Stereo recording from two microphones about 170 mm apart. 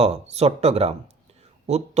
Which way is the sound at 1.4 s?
40° right (ahead or behind).